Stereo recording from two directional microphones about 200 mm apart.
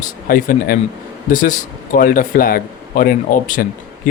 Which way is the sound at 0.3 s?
45° left (ahead or behind).